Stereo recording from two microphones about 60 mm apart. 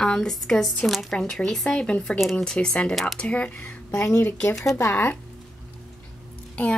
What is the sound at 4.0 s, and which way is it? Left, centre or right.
Speech, left.